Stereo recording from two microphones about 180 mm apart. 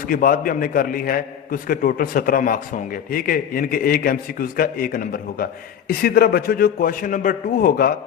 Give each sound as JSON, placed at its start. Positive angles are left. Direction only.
{"t": 0.1, "sound": "a man's voice", "side_deg": 50}